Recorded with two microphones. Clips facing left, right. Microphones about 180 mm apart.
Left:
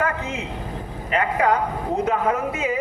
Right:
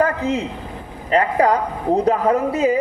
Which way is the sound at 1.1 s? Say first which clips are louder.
Right 4 dB; 35° right (ahead or behind).